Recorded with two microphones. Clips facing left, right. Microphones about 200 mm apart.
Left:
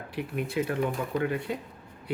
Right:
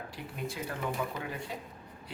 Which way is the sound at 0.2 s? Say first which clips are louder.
Left 10 dB; 65° left (ahead or behind).